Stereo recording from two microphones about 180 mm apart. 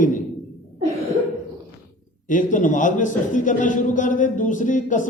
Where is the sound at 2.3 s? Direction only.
45° left (ahead or behind).